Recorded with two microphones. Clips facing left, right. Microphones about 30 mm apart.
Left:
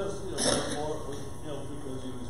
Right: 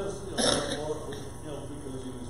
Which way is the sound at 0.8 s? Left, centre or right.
Centre.